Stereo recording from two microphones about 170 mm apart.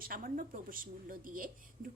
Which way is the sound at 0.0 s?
55° right (ahead or behind).